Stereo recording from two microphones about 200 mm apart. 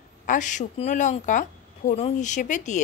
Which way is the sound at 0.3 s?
40° left (ahead or behind).